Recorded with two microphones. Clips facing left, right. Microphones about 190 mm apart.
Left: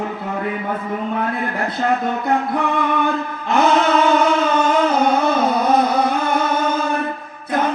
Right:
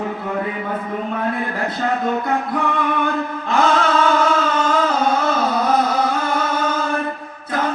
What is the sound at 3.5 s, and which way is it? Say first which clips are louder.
Chant: left 2 dB; 20° left (ahead or behind).